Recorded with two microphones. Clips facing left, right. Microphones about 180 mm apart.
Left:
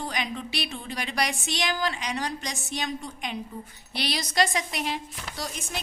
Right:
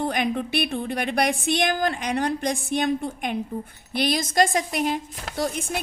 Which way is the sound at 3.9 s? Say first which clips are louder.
Right 6 dB; 50° right (ahead or behind).